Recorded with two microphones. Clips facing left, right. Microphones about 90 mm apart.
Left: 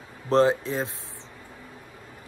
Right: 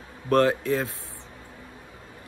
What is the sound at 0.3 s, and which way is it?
Speech, 20° left (ahead or behind).